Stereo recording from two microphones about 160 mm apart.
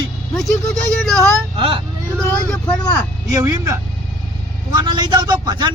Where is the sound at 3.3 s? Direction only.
20° right (ahead or behind).